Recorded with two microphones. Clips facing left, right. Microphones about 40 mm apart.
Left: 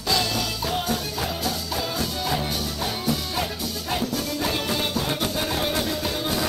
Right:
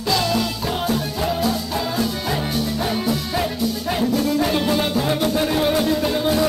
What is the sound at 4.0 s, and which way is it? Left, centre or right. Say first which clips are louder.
Music: right 9 dB; centre.